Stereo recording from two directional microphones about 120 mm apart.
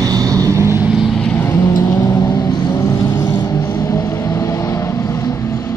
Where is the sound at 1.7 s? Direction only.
30° left (ahead or behind).